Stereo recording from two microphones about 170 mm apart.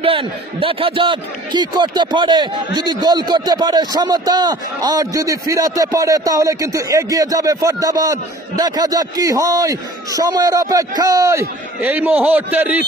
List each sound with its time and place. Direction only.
0.0 s a man's voice: 30° right (ahead or behind); by 12.6 s 10° right (ahead or behind)